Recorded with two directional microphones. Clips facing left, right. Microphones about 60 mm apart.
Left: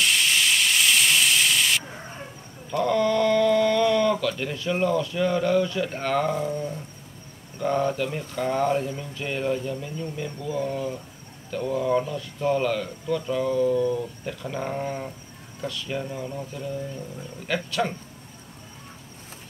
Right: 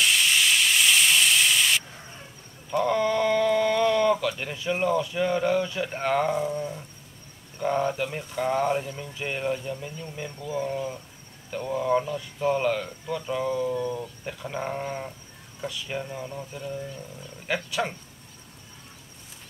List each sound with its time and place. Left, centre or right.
0.0 s steam: centre
1.9 s chicken: left
2.7 s speech: centre
7.6 s speech: centre
16.0 s speech: centre
17.6 s speech: centre